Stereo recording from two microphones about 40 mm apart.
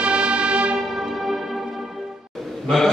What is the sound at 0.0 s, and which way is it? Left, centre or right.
Music, right.